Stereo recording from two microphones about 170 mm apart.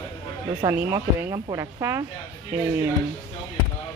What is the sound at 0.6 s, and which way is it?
Speech, 15° right (ahead or behind).